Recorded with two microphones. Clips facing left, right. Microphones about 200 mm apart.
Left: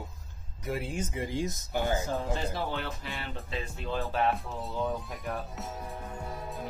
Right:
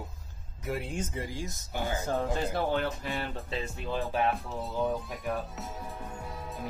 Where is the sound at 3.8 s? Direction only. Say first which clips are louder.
Even; 15° right (ahead or behind).